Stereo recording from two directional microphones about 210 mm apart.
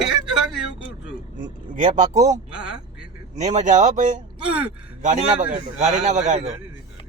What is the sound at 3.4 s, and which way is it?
Speech, 35° right (ahead or behind).